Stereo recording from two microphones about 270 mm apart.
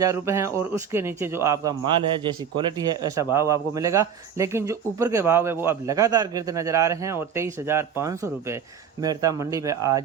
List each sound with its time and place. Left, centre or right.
0.0 s speech: centre